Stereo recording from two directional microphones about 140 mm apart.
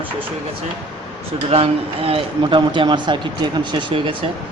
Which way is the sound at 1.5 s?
45° right (ahead or behind).